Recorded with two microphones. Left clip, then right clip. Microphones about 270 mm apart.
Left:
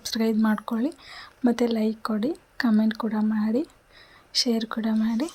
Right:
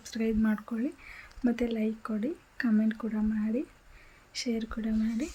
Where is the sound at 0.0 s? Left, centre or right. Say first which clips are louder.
Left 6 dB; centre.